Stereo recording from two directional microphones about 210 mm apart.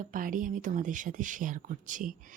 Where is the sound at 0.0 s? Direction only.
40° right (ahead or behind).